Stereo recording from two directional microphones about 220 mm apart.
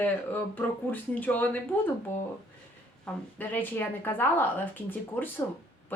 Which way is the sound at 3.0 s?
10° left (ahead or behind).